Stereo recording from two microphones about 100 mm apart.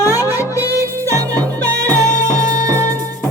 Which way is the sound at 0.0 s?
35° left (ahead or behind).